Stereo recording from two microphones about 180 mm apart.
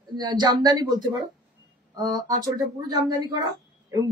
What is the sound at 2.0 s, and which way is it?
Speech, 20° right (ahead or behind).